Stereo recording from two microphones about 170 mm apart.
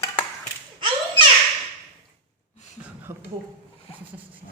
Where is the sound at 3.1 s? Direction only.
15° right (ahead or behind).